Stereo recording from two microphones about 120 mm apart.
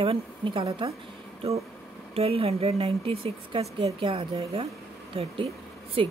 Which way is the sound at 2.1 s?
55° right (ahead or behind).